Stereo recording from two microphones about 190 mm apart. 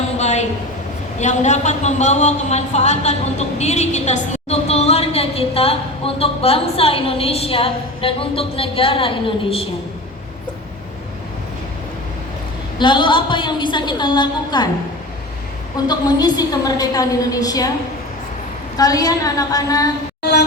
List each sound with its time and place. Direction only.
0.2 s a sound: 35° left (ahead or behind)
1.2 s a woman's voice: 40° left (ahead or behind)
12.8 s a woman's voice: 25° left (ahead or behind)
15.9 s a woman's voice: 20° left (ahead or behind)
18.8 s a woman's voice: 20° left (ahead or behind)